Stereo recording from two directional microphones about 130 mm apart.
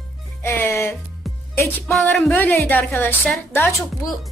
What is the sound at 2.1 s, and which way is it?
A woman's voice, 10° left (ahead or behind).